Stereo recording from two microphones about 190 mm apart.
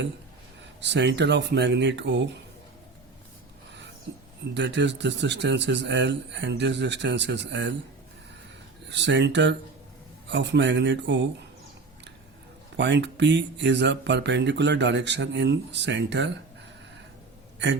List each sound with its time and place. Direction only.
0.8 s speech: 70° right (ahead or behind)
4.5 s speech: 70° right (ahead or behind)
8.9 s speech: 70° right (ahead or behind)
12.7 s speech: 70° right (ahead or behind)